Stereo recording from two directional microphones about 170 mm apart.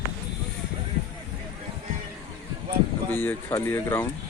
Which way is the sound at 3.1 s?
10° left (ahead or behind).